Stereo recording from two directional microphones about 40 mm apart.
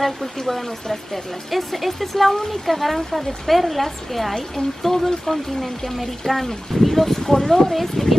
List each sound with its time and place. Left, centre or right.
0.0 s speech: centre